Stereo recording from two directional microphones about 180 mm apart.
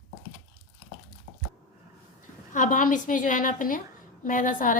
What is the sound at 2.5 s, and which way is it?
A woman's voice, 45° left (ahead or behind).